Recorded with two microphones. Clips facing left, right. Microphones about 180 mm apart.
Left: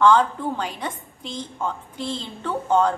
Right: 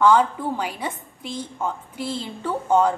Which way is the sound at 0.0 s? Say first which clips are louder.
Even; 10° right (ahead or behind).